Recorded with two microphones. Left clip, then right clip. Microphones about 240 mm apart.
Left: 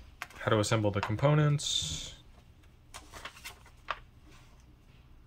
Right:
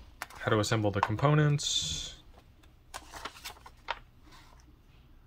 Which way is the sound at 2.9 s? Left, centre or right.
Right.